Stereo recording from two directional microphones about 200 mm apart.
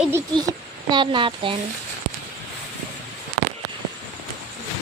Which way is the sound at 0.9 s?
25° right (ahead or behind).